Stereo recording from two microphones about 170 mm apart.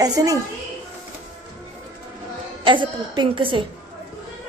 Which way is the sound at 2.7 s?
30° right (ahead or behind).